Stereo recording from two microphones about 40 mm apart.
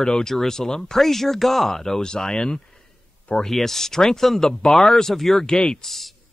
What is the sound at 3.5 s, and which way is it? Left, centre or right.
Speech, centre.